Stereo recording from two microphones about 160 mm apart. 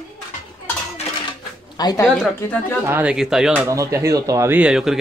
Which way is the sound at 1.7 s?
25° left (ahead or behind).